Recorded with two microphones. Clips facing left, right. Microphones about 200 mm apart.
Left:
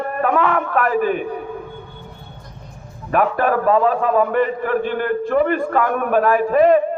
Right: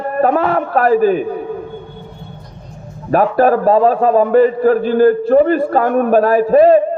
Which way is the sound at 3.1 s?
35° right (ahead or behind).